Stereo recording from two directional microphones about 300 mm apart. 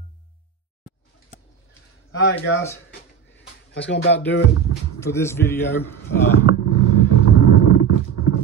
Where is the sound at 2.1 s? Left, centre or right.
Left.